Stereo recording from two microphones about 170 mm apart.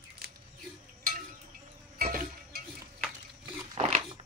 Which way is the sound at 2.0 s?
60° right (ahead or behind).